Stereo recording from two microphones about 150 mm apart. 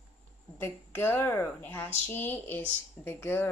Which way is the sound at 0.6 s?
15° left (ahead or behind).